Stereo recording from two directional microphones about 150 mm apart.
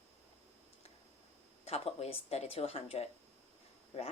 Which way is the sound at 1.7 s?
45° left (ahead or behind).